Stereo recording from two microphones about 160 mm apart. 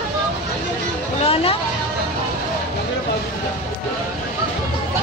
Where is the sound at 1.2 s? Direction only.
40° left (ahead or behind).